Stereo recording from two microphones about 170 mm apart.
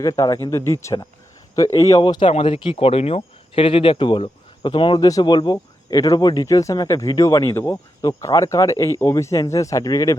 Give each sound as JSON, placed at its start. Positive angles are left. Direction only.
{"t": 0.0, "sound": "speech", "side_deg": 20}